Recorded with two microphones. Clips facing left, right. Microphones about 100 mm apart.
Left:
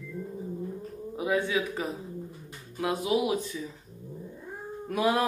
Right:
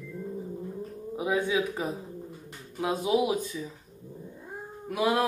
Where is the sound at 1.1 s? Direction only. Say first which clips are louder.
Right 1 dB; 20° right (ahead or behind).